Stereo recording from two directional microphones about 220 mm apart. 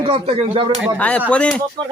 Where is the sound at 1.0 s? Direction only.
5° left (ahead or behind).